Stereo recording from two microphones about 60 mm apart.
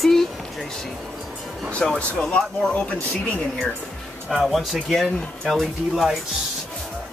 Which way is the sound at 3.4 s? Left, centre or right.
Centre.